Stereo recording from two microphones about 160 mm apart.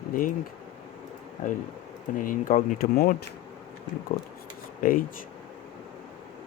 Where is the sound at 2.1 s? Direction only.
60° left (ahead or behind).